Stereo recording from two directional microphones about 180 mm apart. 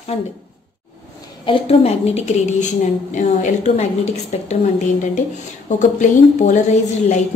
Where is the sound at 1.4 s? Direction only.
30° left (ahead or behind).